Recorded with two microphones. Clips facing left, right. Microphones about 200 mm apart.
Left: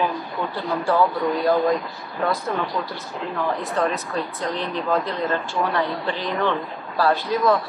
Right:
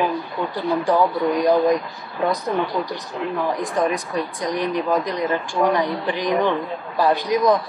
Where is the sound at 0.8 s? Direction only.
15° right (ahead or behind).